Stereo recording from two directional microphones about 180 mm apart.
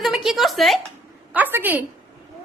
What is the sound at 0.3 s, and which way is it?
Speech, centre (ahead or behind).